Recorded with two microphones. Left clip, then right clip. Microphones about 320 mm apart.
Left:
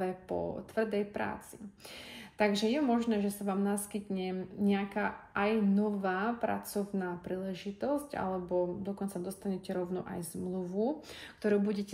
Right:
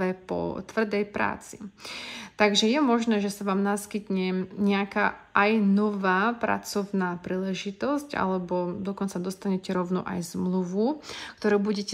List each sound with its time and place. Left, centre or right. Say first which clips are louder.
0.0 s a woman's voice: right 6 dB; centre